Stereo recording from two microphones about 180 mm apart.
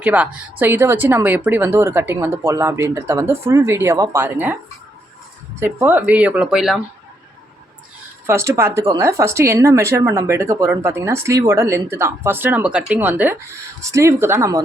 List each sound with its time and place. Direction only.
0.0 s speech: 10° right (ahead or behind)
5.5 s speech: 10° right (ahead or behind)
8.3 s speech: 15° right (ahead or behind)